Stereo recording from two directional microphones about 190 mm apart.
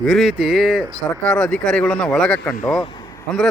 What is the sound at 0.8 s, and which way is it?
Speech, 20° right (ahead or behind).